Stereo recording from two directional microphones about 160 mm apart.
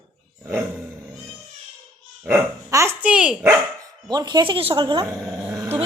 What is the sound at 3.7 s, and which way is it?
Speech, 25° right (ahead or behind).